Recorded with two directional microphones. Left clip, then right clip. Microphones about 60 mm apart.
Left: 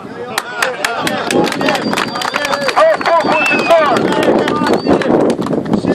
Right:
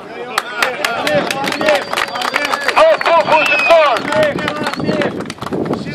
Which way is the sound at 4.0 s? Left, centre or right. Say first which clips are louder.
Left 2 dB; centre.